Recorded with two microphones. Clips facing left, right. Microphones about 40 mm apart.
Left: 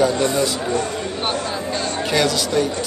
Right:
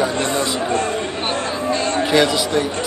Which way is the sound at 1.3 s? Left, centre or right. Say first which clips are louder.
Right 4 dB; right.